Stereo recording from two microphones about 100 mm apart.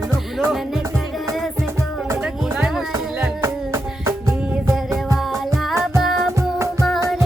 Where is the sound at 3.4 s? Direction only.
30° right (ahead or behind).